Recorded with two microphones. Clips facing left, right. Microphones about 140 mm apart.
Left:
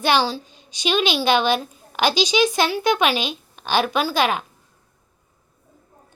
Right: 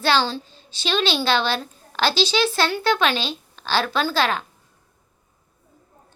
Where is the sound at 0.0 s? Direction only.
15° left (ahead or behind).